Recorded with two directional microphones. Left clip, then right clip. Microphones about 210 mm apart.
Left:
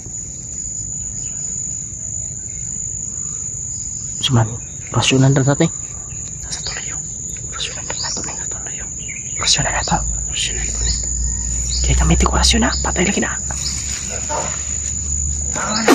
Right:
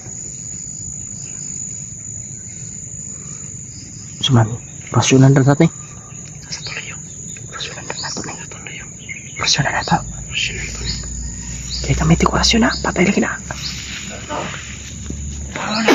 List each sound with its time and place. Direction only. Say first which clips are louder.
4.2 s speech: right 2 dB; 15° right (ahead or behind)
7.6 s wild animals: left 2 dB; 10° right (ahead or behind)
9.4 s speech: even; 10° right (ahead or behind)
10.3 s wild animals: right 2 dB; 40° left (ahead or behind)
11.8 s speech: right 3 dB; 10° right (ahead or behind)